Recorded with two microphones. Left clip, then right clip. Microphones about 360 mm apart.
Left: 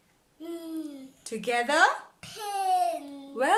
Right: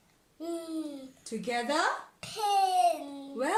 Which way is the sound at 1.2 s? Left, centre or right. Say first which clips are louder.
Left 5 dB; left.